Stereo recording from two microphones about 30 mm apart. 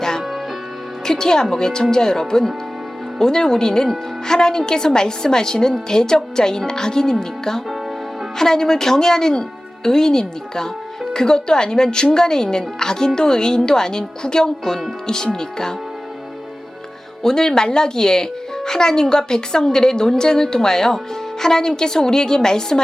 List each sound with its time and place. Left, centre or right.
0.0 s music: centre
1.0 s a woman's voice: centre
17.2 s speech: centre